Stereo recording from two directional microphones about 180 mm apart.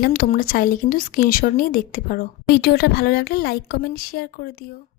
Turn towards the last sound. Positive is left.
turn(degrees=55)  # may be behind; listen again after turning